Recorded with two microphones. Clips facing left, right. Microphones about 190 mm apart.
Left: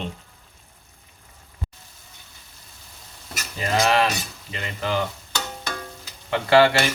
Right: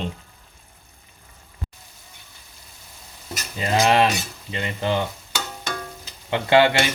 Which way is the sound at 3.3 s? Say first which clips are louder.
Right 1 dB; 20° right (ahead or behind).